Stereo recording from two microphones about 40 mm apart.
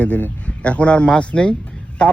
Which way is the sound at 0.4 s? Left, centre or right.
Left.